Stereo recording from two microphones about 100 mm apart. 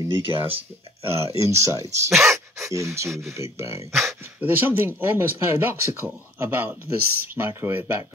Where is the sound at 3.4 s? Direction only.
30° right (ahead or behind).